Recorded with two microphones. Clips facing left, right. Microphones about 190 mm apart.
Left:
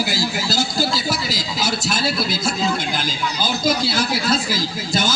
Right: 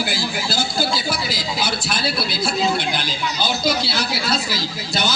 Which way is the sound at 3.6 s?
45° left (ahead or behind).